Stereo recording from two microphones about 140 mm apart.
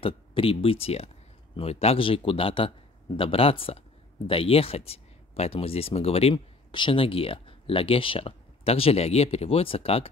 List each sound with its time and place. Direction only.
0.0 s speech: 40° left (ahead or behind)